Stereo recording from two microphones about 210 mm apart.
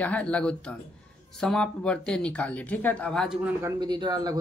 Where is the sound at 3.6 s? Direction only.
20° right (ahead or behind).